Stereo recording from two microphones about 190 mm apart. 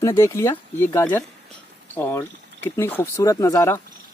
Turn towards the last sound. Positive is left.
turn(degrees=15)  # may be behind; listen again after turning